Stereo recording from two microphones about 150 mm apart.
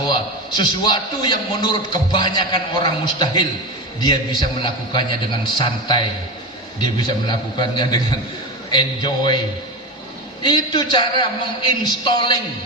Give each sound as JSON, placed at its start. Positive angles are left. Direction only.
{"t": 0.0, "sound": "a man's voice", "side_deg": 30}
{"t": 5.5, "sound": "a man's voice", "side_deg": 30}
{"t": 10.4, "sound": "a man's voice", "side_deg": 30}